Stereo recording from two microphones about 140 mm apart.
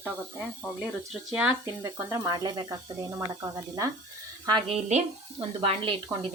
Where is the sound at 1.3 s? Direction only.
5° right (ahead or behind).